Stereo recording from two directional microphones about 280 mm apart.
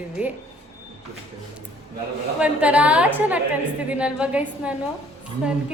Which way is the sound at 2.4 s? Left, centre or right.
Centre.